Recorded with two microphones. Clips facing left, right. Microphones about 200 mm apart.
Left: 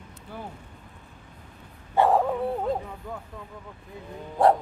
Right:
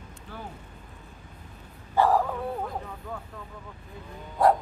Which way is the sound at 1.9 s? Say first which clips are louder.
Left 2 dB; 20° left (ahead or behind).